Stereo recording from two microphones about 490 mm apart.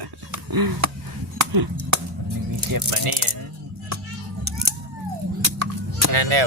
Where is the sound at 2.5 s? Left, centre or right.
Right.